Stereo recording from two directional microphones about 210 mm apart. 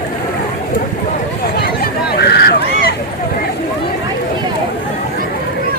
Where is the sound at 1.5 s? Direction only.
50° left (ahead or behind).